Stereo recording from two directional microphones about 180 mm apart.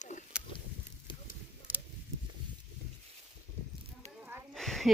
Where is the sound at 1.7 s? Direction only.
10° right (ahead or behind).